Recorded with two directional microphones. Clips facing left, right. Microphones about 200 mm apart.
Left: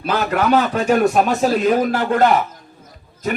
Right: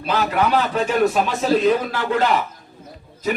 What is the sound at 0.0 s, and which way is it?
Speech, 50° left (ahead or behind).